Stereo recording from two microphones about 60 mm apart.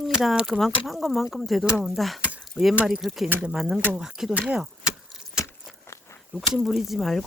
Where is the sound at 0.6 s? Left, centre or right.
Centre.